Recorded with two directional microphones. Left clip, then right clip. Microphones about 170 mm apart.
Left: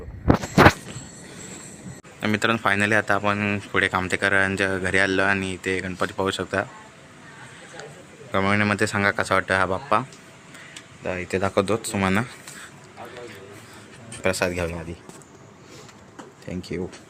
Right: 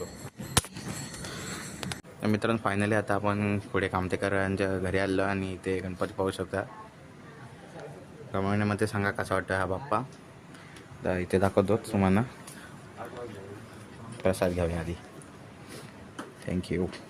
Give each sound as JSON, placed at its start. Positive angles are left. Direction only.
{"t": 2.2, "sound": "speech", "side_deg": 0}
{"t": 8.3, "sound": "speech", "side_deg": 15}
{"t": 11.0, "sound": "speech", "side_deg": -15}
{"t": 14.3, "sound": "speech", "side_deg": -5}
{"t": 16.5, "sound": "speech", "side_deg": -5}